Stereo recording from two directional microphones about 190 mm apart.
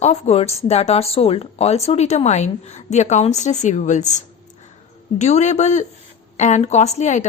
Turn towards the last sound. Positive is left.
turn(degrees=40)  # may be behind; listen again after turning